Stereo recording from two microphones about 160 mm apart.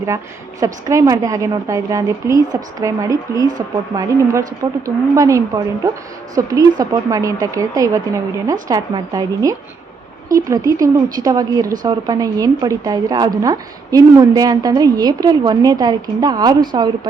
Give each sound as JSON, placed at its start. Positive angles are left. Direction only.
{"t": 0.6, "sound": "a woman's voice", "side_deg": -20}